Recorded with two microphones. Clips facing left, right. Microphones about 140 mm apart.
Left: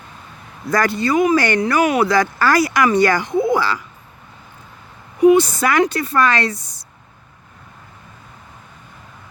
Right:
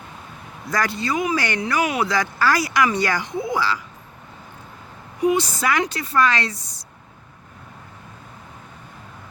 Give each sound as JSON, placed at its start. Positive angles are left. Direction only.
{"t": 0.7, "sound": "speech", "side_deg": 55}
{"t": 5.2, "sound": "speech", "side_deg": 55}